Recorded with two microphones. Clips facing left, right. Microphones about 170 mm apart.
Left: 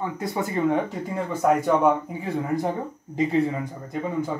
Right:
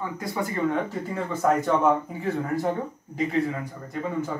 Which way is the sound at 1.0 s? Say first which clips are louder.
Left 1 dB; 10° left (ahead or behind).